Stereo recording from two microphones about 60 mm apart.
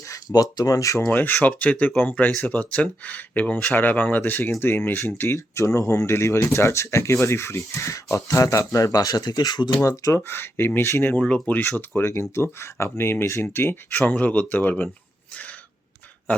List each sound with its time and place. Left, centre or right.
0.1 s speech: left
1.1 s speech: left
10.2 s speech: left
14.1 s speech: left